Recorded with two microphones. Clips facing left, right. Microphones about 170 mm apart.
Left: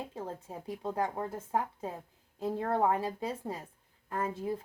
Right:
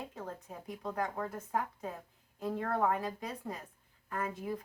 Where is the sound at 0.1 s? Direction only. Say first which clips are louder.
Left 3 dB; 30° left (ahead or behind).